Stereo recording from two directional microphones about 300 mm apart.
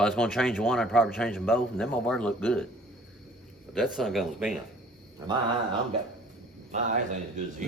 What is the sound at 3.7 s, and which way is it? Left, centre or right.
Speech, centre.